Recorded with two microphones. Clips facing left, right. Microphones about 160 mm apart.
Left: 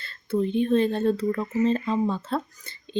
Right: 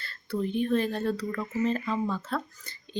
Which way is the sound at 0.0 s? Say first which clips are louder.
Left 5 dB; 20° left (ahead or behind).